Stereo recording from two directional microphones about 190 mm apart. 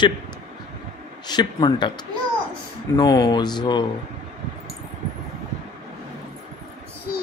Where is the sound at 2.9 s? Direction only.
20° left (ahead or behind).